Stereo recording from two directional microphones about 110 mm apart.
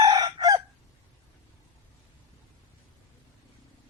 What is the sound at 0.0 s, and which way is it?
Chicken, 40° right (ahead or behind).